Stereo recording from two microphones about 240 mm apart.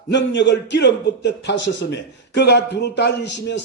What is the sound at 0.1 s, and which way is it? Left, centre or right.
A man's voice, left.